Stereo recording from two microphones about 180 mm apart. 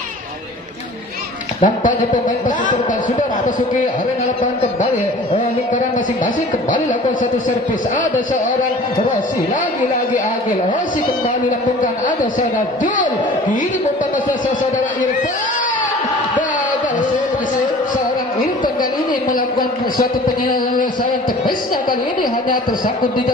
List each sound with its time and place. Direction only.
1.6 s a man's voice: 45° left (ahead or behind)
12.4 s a man's voice: 45° left (ahead or behind)